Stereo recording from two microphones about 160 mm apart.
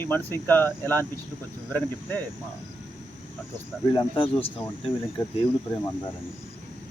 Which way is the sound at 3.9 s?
30° left (ahead or behind).